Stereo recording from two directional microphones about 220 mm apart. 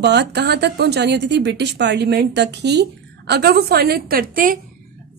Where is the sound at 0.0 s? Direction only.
50° right (ahead or behind).